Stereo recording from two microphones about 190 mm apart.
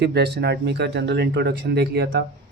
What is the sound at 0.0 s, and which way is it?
Speech, 60° right (ahead or behind).